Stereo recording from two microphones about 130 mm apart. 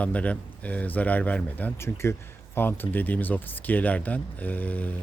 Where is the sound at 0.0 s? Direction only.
10° left (ahead or behind).